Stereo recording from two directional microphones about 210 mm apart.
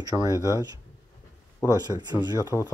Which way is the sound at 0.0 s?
15° right (ahead or behind).